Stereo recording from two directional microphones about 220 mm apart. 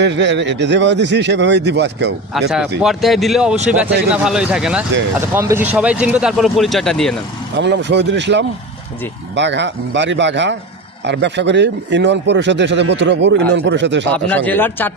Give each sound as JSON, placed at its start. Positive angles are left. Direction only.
{"t": 0.0, "sound": "speech", "side_deg": -55}
{"t": 2.3, "sound": "speech", "side_deg": 0}
{"t": 7.5, "sound": "speech", "side_deg": -55}
{"t": 14.3, "sound": "speech", "side_deg": 5}